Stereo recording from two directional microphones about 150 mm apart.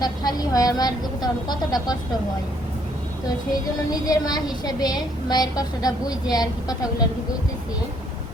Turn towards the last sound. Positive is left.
turn(degrees=25)  # may be behind; listen again after turning